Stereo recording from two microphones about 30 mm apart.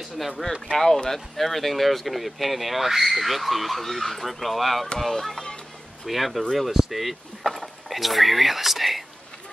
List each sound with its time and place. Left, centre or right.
1.0 s speech: centre
6.0 s speech: centre